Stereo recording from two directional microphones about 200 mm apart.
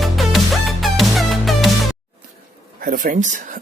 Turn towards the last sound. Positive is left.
turn(degrees=-40)  # may be behind; listen again after turning